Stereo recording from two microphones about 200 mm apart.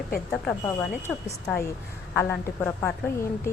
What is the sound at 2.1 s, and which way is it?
A woman's voice, 10° left (ahead or behind).